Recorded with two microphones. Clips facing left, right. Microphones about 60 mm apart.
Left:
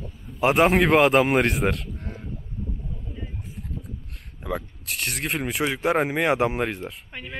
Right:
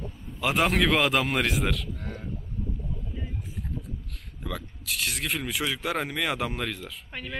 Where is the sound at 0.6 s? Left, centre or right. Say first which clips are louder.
Left 5 dB; centre.